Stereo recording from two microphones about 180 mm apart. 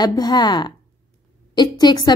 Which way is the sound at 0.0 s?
20° left (ahead or behind).